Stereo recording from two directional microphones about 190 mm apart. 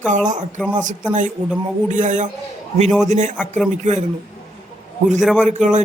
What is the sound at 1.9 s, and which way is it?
Speech, 40° right (ahead or behind).